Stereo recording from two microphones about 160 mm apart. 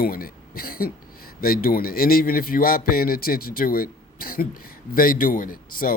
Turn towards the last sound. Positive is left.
turn(degrees=60)  # may be behind; listen again after turning